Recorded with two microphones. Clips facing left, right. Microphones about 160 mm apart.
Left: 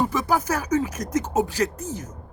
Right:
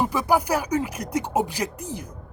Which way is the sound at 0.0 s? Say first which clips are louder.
Right 1 dB; 10° right (ahead or behind).